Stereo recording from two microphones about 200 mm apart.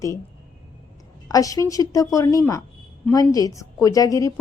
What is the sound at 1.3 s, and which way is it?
A woman's voice, 15° left (ahead or behind).